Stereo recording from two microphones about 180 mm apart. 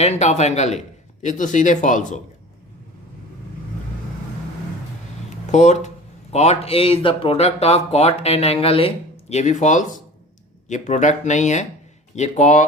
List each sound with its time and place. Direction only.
0.0 s a man's voice: 40° left (ahead or behind)
5.5 s speech: 40° left (ahead or behind)